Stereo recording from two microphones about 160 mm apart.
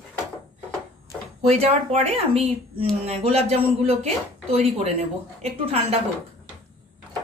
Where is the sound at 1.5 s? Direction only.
40° right (ahead or behind).